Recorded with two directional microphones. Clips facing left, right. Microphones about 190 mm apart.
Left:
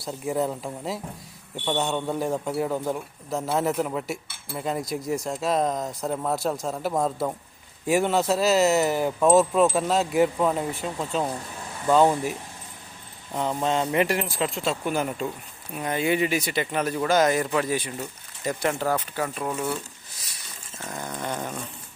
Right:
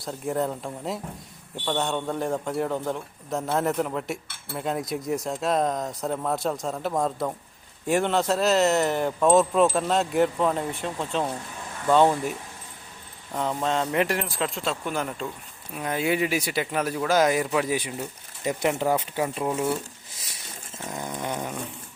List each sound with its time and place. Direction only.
0.0 s speech: 5° left (ahead or behind)
13.3 s speech: centre (ahead or behind); by 20.2 s 25° right (ahead or behind)
20.8 s dog: 15° right (ahead or behind)